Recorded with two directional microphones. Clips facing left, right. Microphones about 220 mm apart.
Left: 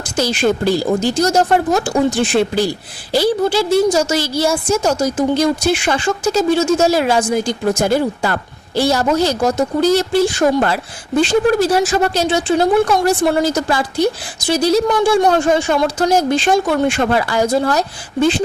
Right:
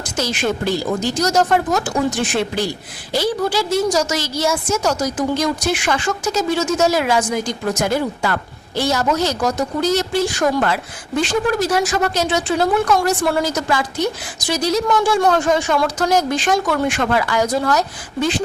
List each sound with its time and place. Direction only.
0.0 s a woman's voice: 30° left (ahead or behind)